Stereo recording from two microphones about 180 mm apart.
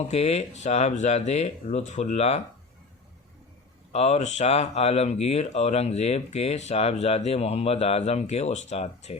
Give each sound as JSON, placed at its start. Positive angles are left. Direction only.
{"t": 0.1, "sound": "speech", "side_deg": 35}
{"t": 3.9, "sound": "speech", "side_deg": 35}